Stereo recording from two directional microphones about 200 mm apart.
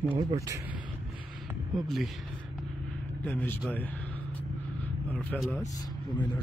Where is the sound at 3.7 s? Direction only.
10° left (ahead or behind).